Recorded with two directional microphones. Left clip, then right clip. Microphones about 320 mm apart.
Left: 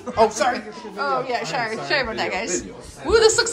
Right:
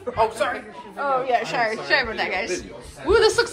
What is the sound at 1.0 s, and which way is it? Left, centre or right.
A woman's voice, centre.